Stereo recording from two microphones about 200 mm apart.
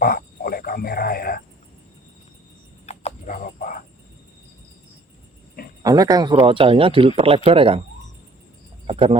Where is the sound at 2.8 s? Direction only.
35° left (ahead or behind).